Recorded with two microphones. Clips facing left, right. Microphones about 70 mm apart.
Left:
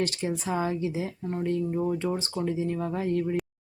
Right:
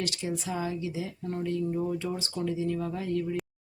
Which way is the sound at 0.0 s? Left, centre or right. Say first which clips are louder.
Left 4 dB; left.